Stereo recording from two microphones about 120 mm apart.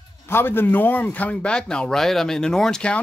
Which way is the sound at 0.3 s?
20° left (ahead or behind).